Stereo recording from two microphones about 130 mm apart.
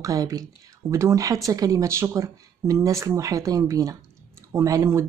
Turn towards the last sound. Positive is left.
turn(degrees=-25)  # may be behind; listen again after turning